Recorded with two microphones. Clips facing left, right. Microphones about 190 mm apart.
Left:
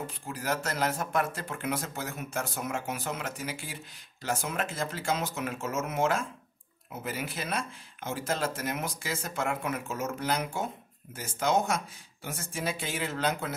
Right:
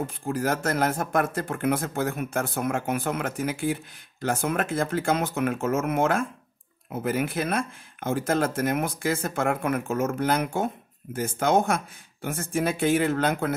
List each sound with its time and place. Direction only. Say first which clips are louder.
0.0 s speech: right 9 dB; 50° right (ahead or behind)